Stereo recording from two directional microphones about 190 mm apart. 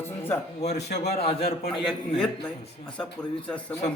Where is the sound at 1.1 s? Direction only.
30° left (ahead or behind).